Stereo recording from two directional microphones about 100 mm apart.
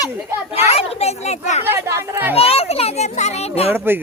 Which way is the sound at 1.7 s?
30° right (ahead or behind).